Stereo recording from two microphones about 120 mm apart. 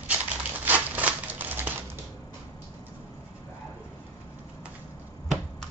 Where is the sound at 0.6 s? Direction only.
15° right (ahead or behind).